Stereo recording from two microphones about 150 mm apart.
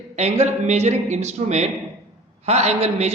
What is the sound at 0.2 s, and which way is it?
A man's voice, 45° right (ahead or behind).